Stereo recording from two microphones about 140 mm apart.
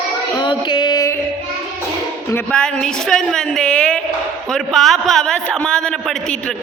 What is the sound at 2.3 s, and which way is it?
A woman's voice, 5° left (ahead or behind).